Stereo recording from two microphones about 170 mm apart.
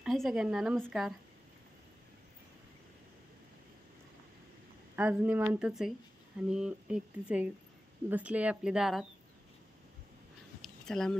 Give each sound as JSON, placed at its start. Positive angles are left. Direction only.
{"t": 0.0, "sound": "a woman's voice", "side_deg": 0}
{"t": 4.9, "sound": "a woman's voice", "side_deg": -10}
{"t": 10.6, "sound": "a sound", "side_deg": 5}